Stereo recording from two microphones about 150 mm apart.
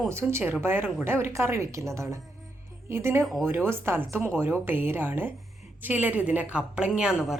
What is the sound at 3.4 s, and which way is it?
A woman's voice, 15° right (ahead or behind).